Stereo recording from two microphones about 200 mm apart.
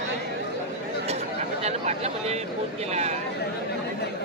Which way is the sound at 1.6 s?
35° right (ahead or behind).